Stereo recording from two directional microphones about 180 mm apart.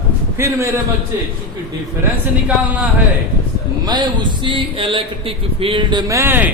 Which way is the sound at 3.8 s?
25° right (ahead or behind).